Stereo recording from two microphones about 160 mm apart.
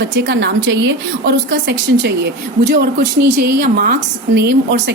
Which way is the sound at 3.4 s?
70° right (ahead or behind).